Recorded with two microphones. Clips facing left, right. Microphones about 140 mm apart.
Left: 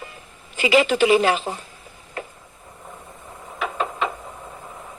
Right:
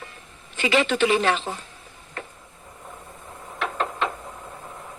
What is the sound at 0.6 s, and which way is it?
Speech, 10° left (ahead or behind).